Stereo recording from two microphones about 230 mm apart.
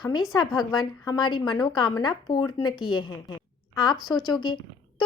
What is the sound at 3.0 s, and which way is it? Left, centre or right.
A woman's voice, centre.